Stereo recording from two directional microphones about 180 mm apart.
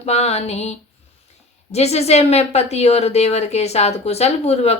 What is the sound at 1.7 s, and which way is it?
Speech, 35° left (ahead or behind).